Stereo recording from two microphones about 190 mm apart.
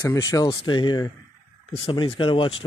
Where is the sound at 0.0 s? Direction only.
15° left (ahead or behind).